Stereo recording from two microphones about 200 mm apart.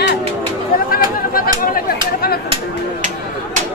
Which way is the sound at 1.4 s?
45° left (ahead or behind).